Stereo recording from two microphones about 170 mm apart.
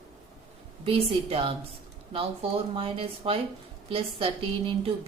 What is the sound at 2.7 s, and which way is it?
A woman's voice, 30° right (ahead or behind).